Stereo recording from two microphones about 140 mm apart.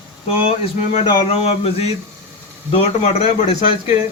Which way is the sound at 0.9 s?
45° left (ahead or behind).